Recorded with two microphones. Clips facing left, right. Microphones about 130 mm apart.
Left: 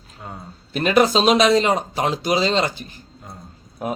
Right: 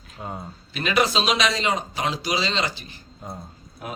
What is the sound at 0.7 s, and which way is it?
Speech, 45° left (ahead or behind).